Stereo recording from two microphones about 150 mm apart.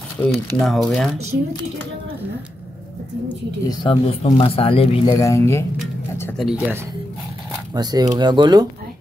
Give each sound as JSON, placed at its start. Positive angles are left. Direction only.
{"t": 0.2, "sound": "speech", "side_deg": 10}
{"t": 0.6, "sound": "speech", "side_deg": 0}
{"t": 3.6, "sound": "speech", "side_deg": 35}
{"t": 5.2, "sound": "speech", "side_deg": 20}
{"t": 6.3, "sound": "speech", "side_deg": -5}
{"t": 7.7, "sound": "speech", "side_deg": -25}